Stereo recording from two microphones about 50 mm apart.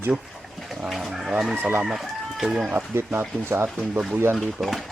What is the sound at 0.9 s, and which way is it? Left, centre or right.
Speech, centre.